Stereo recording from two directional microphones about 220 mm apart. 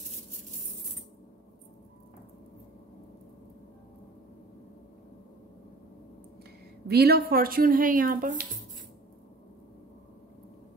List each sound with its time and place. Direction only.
6.9 s a woman's voice: 45° right (ahead or behind)